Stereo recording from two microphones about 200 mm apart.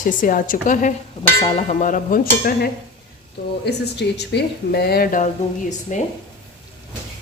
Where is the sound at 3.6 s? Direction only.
55° left (ahead or behind); by 6.0 s 40° left (ahead or behind).